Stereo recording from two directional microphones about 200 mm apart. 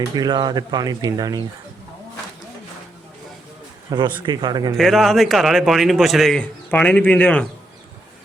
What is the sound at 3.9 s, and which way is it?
Speech, 20° right (ahead or behind).